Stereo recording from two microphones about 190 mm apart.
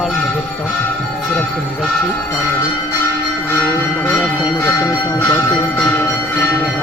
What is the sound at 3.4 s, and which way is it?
Bell, 10° left (ahead or behind).